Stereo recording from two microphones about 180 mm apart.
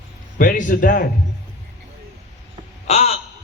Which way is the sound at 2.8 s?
35° left (ahead or behind).